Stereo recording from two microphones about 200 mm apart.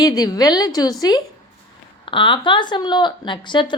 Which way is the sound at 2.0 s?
25° left (ahead or behind).